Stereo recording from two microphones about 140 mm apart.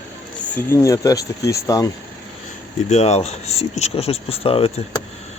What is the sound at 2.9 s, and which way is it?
Speech, 50° left (ahead or behind).